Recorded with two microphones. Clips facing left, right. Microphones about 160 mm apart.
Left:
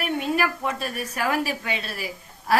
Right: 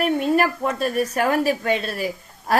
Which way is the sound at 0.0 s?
40° right (ahead or behind).